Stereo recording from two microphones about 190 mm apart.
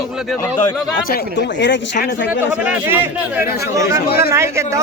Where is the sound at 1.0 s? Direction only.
60° left (ahead or behind).